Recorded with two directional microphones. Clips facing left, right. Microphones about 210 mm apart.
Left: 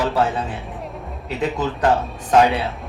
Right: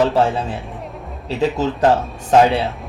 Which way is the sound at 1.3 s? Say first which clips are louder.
Right 4 dB; 25° right (ahead or behind).